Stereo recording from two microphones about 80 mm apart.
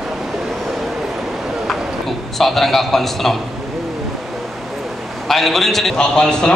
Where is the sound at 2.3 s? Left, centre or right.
Centre.